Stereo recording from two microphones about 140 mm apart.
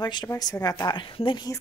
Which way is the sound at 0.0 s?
30° left (ahead or behind).